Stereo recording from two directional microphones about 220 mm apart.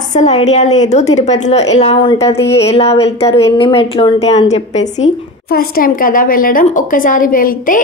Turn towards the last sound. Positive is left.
turn(degrees=40)  # may be behind; listen again after turning